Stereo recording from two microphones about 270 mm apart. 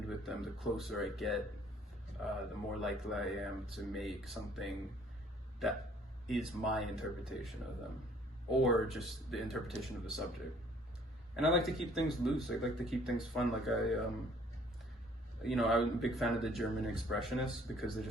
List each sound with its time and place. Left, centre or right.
0.2 s speech: centre
11.3 s speech: centre
15.4 s speech: centre